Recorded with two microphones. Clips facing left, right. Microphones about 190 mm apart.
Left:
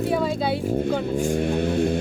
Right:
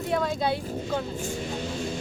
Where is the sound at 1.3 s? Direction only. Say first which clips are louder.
Left 10 dB; 55° left (ahead or behind).